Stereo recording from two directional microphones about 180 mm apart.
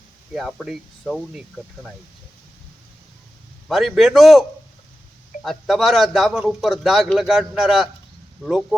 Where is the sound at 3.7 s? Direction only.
Centre (ahead or behind).